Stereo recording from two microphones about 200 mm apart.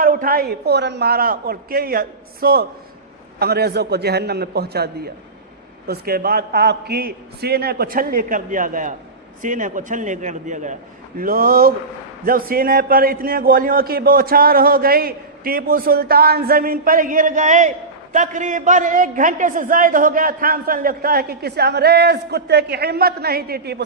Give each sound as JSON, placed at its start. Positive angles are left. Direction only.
{"t": 0.0, "sound": "a man's voice", "side_deg": -45}